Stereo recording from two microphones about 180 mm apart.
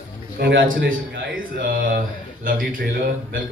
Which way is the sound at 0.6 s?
55° right (ahead or behind).